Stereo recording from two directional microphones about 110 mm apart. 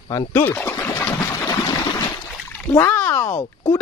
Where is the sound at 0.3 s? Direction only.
20° left (ahead or behind).